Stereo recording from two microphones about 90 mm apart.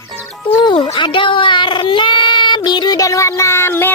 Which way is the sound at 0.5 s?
65° left (ahead or behind).